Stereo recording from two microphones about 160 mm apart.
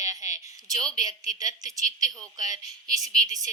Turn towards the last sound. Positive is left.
turn(degrees=-20)  # may be behind; listen again after turning